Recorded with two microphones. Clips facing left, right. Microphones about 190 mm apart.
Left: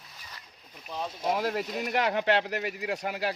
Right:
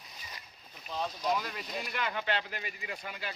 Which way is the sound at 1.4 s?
70° left (ahead or behind).